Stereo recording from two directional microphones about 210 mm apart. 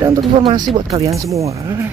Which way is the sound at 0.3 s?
25° right (ahead or behind).